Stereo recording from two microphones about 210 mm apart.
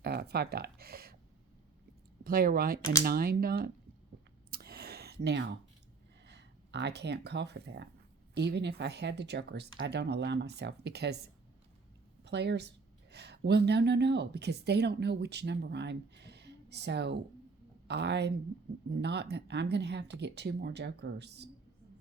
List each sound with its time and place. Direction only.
0.0 s speech: 50° right (ahead or behind)
2.2 s speech: 45° right (ahead or behind)
4.5 s a sound: 45° right (ahead or behind)
6.2 s speech: 55° right (ahead or behind)